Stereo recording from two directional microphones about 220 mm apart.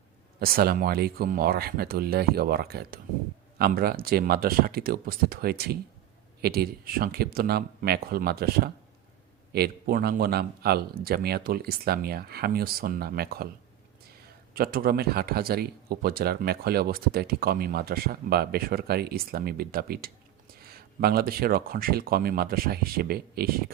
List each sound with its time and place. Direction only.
0.3 s speech: 45° right (ahead or behind)
14.5 s speech: 40° right (ahead or behind)